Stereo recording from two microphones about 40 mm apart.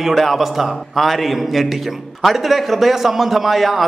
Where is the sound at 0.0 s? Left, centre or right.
Centre.